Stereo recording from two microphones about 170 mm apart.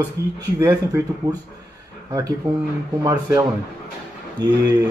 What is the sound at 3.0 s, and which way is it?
Speech, 20° right (ahead or behind).